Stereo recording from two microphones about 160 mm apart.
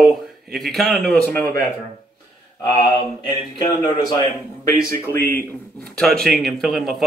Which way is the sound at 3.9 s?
25° left (ahead or behind).